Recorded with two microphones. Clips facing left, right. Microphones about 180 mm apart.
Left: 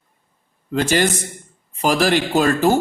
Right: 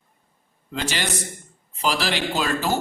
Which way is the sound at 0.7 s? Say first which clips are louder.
Left 9 dB; 50° left (ahead or behind).